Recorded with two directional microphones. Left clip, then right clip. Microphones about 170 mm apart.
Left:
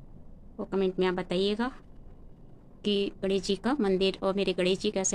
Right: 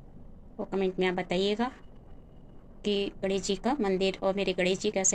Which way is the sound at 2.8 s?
20° left (ahead or behind).